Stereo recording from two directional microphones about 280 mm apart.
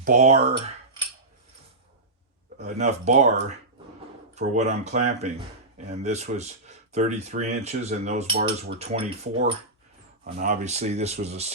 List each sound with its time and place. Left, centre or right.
0.0 s speech: right
2.6 s speech: right
8.8 s speech: right